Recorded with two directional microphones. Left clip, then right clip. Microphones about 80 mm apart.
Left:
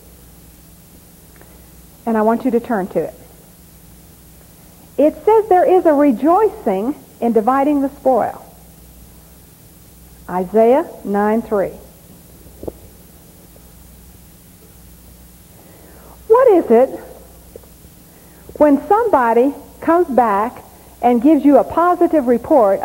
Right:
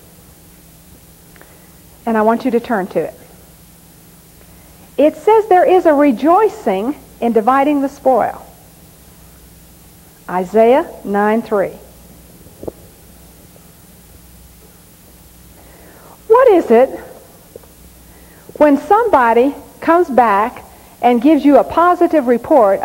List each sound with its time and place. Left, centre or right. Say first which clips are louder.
2.0 s a woman's voice: right 2 dB; centre
4.9 s a woman's voice: right 2 dB; centre
10.2 s a woman's voice: right 2 dB; centre
16.1 s cat: right 2 dB; centre
18.6 s a woman's voice: right 2 dB; centre